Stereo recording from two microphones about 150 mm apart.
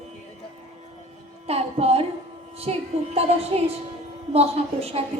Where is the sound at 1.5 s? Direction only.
45° right (ahead or behind).